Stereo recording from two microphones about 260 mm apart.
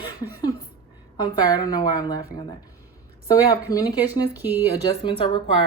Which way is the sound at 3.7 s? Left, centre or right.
Centre.